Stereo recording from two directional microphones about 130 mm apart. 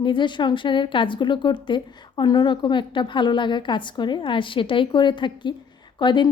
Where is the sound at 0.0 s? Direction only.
40° left (ahead or behind).